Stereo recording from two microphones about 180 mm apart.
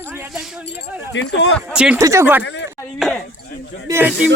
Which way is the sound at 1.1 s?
90° left.